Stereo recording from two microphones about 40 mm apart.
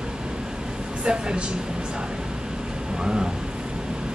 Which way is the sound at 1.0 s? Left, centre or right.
Right.